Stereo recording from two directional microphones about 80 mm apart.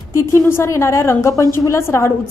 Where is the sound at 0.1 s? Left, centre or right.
Left.